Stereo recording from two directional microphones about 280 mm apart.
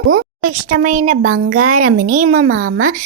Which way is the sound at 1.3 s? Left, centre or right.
Right.